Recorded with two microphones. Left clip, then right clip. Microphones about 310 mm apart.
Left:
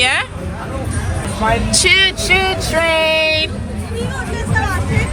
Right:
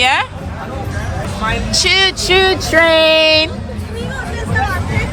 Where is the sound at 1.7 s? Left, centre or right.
Centre.